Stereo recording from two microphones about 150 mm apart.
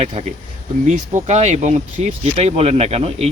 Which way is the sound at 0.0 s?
40° right (ahead or behind).